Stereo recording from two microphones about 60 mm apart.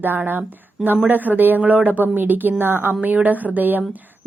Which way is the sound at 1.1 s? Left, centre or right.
Right.